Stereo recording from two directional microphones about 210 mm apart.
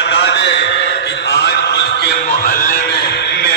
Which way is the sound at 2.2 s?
40° left (ahead or behind).